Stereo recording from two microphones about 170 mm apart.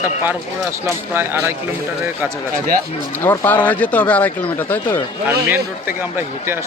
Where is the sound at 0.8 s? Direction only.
15° right (ahead or behind).